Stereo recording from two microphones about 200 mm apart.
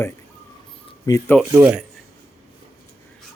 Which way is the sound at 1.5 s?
15° right (ahead or behind).